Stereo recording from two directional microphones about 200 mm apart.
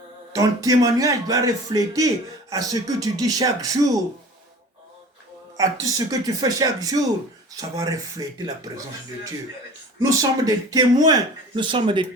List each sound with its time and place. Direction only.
0.3 s a man's voice: 20° right (ahead or behind)
5.5 s a man's voice: 15° right (ahead or behind)
10.0 s speech: 15° right (ahead or behind)